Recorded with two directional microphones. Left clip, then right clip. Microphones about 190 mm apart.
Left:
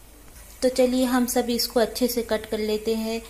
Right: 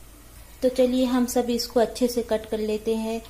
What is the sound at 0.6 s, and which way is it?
A woman's voice, centre (ahead or behind).